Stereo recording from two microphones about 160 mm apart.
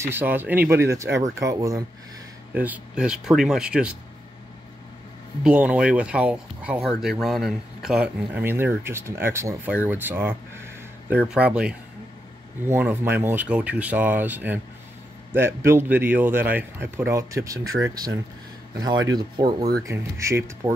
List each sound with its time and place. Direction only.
0.0 s speech: 15° right (ahead or behind)
2.5 s speech: 10° right (ahead or behind)
5.4 s speech: 5° right (ahead or behind)